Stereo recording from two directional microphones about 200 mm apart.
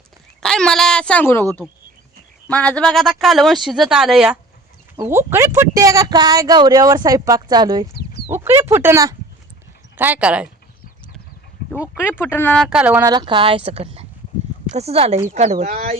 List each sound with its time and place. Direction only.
0.4 s speech: 5° left (ahead or behind); by 7.9 s 20° right (ahead or behind)
7.9 s chicken: 55° left (ahead or behind)
8.3 s speech: 10° right (ahead or behind)
11.6 s a sound: 50° left (ahead or behind)
11.9 s speech: 10° left (ahead or behind)
12.6 s speech: 5° right (ahead or behind)
13.1 s speech: 25° right (ahead or behind)